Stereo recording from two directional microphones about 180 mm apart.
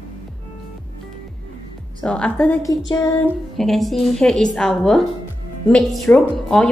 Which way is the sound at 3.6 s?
Centre (ahead or behind).